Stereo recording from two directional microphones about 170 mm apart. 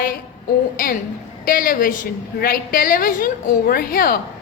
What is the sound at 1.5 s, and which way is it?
A woman's voice, 55° left (ahead or behind).